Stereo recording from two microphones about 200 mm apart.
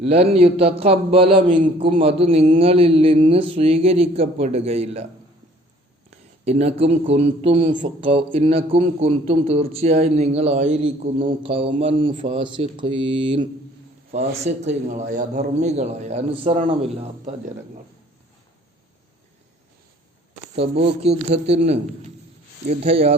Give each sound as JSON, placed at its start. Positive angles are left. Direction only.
{"t": 0.0, "sound": "a man's voice", "side_deg": -30}
{"t": 1.5, "sound": "a man's voice", "side_deg": -40}
{"t": 2.0, "sound": "a man's voice", "side_deg": -30}
{"t": 6.4, "sound": "a man's voice", "side_deg": -30}
{"t": 20.6, "sound": "a man's voice", "side_deg": -30}